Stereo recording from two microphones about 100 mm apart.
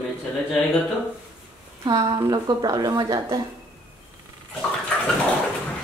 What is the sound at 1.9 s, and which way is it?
A woman's voice, 45° right (ahead or behind).